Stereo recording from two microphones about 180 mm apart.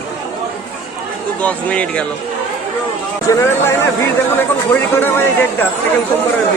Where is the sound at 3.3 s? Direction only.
15° left (ahead or behind).